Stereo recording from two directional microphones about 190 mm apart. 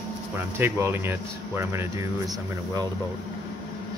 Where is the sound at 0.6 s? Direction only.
10° right (ahead or behind).